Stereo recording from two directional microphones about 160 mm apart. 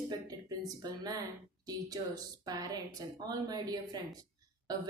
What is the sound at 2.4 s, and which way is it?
A woman's voice, 20° right (ahead or behind).